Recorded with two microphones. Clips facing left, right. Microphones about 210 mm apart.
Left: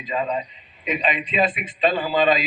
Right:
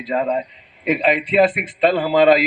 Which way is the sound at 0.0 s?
60° right (ahead or behind).